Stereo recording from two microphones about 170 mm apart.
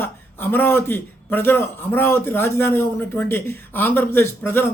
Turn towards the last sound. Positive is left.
turn(degrees=10)  # may be behind; listen again after turning